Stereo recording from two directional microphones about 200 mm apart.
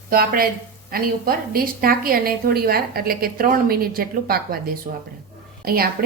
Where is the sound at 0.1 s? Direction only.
50° right (ahead or behind).